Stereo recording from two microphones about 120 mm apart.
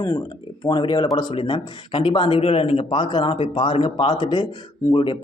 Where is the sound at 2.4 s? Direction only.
55° left (ahead or behind).